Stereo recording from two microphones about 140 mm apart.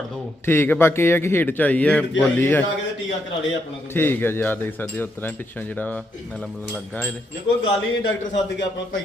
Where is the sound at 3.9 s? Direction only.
15° left (ahead or behind).